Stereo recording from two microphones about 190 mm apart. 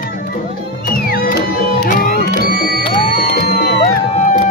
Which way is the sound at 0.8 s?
55° left (ahead or behind).